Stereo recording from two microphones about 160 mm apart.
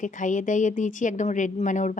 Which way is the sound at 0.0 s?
50° left (ahead or behind).